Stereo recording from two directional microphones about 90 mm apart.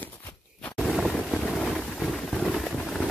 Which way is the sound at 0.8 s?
5° left (ahead or behind).